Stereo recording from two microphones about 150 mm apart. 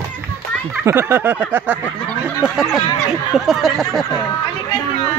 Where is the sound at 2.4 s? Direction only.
Centre (ahead or behind).